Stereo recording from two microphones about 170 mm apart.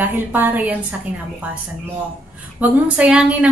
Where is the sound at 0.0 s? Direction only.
10° right (ahead or behind).